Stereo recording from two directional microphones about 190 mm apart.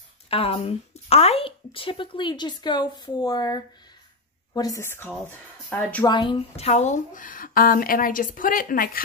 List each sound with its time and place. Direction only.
0.3 s speech: 30° left (ahead or behind); by 6.0 s 10° left (ahead or behind)
6.0 s speech: 25° left (ahead or behind); by 9.0 s 50° left (ahead or behind)